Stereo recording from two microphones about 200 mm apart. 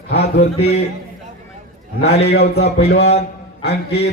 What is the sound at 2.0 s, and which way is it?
A man's voice, 30° left (ahead or behind).